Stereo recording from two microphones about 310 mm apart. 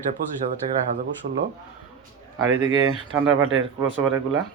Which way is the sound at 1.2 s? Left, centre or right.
Right.